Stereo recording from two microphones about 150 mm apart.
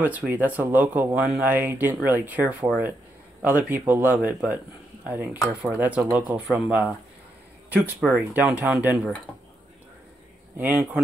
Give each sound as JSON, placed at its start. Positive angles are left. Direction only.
{"t": 0.0, "sound": "speech", "side_deg": -10}
{"t": 10.6, "sound": "speech", "side_deg": -10}